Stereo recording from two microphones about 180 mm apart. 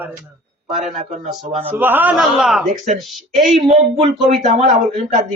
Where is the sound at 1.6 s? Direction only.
10° right (ahead or behind).